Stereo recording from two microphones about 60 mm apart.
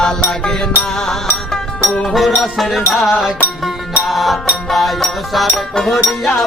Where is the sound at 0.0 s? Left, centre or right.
Centre.